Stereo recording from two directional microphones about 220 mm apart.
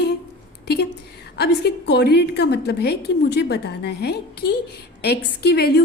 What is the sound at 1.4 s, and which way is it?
A woman's voice, 50° left (ahead or behind).